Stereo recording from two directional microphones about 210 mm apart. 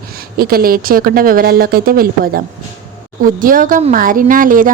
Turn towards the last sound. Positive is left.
turn(degrees=-40)  # may be behind; listen again after turning